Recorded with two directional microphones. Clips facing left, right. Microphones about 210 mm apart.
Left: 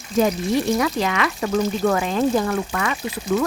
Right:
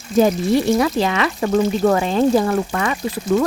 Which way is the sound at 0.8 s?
30° right (ahead or behind).